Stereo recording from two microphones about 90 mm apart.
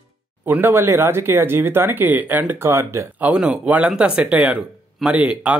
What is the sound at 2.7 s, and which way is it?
Speech, 30° right (ahead or behind).